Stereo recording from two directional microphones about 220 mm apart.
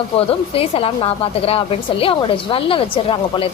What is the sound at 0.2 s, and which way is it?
A woman's voice, 25° left (ahead or behind).